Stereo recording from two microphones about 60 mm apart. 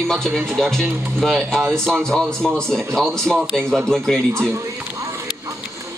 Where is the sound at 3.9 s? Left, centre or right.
Centre.